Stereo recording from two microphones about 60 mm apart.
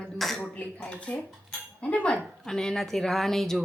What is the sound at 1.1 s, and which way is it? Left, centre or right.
A woman's voice, centre.